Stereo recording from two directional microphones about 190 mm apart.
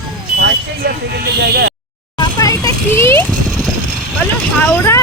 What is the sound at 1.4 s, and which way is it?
Speech, 60° right (ahead or behind).